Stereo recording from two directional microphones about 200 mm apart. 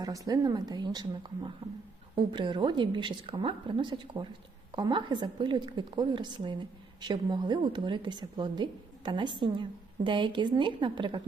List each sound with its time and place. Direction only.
0.0 s a woman's voice: 20° right (ahead or behind)